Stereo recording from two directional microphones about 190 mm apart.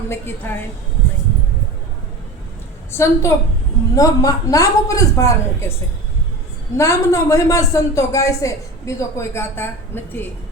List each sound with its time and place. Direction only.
0.1 s speech: 10° left (ahead or behind)
2.9 s speech: 15° left (ahead or behind)
6.7 s speech: 15° left (ahead or behind)